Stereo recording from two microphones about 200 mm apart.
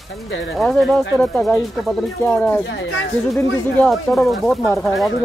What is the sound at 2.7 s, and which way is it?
Speech, 70° left (ahead or behind).